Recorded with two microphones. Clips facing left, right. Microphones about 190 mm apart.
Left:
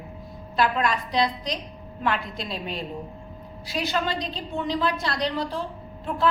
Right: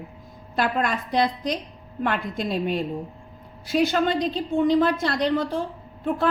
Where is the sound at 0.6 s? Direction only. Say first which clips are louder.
Even; 50° right (ahead or behind).